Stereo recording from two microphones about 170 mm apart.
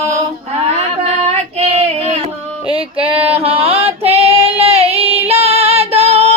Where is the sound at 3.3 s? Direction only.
35° right (ahead or behind).